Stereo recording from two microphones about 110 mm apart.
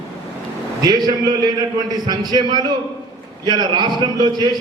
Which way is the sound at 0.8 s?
40° right (ahead or behind).